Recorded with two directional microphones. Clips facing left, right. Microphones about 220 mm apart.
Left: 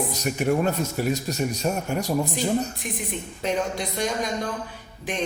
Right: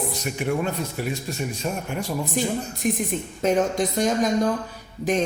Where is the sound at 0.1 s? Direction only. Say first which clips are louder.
Left 2 dB; 40° left (ahead or behind).